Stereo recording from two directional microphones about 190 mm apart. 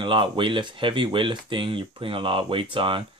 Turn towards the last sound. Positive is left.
turn(degrees=-25)  # may be behind; listen again after turning